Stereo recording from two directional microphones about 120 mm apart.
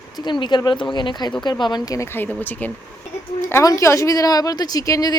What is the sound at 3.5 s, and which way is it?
A woman's voice, 30° left (ahead or behind).